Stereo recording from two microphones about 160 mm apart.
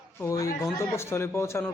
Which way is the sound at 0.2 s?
20° left (ahead or behind).